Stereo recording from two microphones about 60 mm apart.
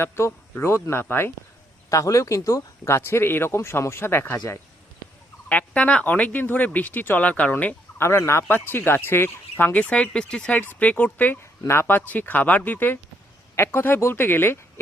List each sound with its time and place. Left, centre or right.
0.0 s speech: left
1.9 s speech: left
5.5 s speech: left
7.9 s speech: left
8.5 s speech: left
9.7 s speech: left
10.1 s speech: centre
10.5 s speech: left
11.6 s speech: left
11.9 s speech: left
13.6 s speech: left